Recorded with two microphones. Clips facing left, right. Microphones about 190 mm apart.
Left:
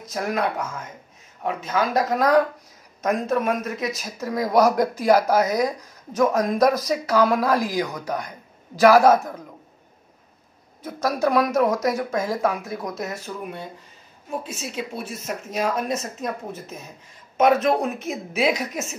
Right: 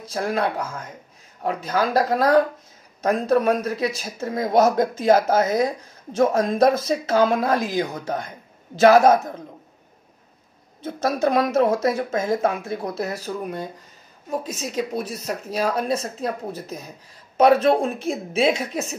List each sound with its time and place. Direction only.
0.0 s speech: 30° right (ahead or behind)
10.8 s speech: 25° right (ahead or behind)